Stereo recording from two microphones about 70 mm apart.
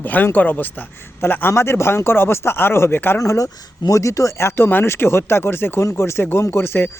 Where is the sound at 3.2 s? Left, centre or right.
Left.